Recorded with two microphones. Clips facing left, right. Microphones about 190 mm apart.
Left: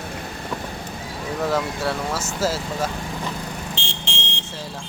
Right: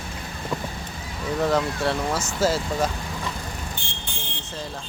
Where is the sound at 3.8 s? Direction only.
80° left.